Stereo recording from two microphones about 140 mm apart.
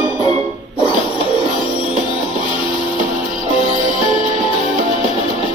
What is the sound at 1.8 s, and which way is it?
Music, 35° left (ahead or behind).